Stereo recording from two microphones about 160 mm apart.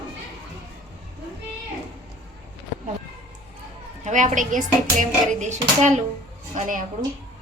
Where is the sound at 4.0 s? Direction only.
50° right (ahead or behind).